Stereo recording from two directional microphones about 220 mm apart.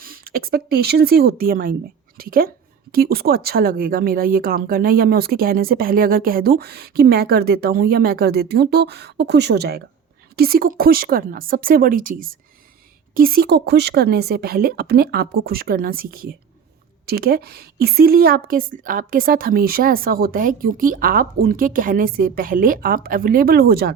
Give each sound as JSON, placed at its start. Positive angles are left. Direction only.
{"t": 0.0, "sound": "a woman's voice", "side_deg": -40}